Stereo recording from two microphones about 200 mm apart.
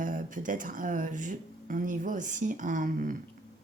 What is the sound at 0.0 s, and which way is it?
Speech, 40° right (ahead or behind).